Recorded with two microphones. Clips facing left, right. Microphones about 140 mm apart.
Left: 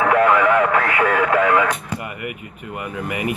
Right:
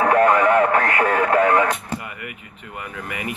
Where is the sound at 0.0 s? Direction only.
35° right (ahead or behind).